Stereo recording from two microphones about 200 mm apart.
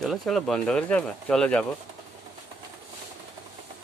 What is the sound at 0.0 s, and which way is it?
Speech, centre (ahead or behind).